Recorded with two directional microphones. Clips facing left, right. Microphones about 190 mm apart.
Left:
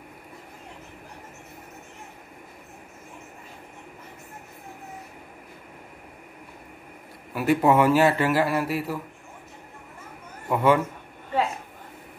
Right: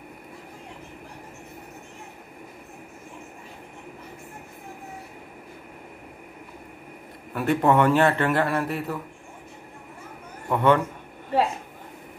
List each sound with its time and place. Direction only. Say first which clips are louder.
7.3 s a man's voice: left 1 dB; 5° left (ahead or behind)
10.5 s a man's voice: even; 5° left (ahead or behind)